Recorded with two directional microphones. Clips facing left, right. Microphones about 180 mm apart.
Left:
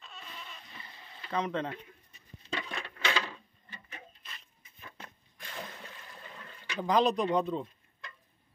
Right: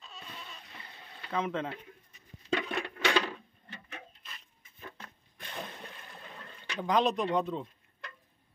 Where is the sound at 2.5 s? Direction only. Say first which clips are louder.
Right 6 dB; 60° right (ahead or behind).